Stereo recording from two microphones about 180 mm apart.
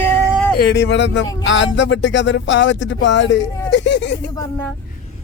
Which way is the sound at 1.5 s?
90° left.